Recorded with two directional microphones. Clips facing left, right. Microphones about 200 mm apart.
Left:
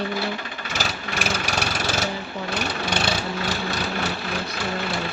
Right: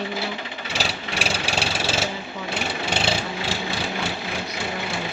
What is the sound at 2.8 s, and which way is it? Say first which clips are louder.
Engine: right 1 dB; 25° right (ahead or behind).